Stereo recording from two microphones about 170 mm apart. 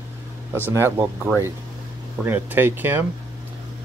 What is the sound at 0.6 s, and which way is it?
Speech, 10° right (ahead or behind).